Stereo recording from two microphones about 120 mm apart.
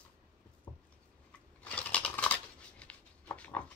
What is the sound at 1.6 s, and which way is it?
Scissors, 10° left (ahead or behind).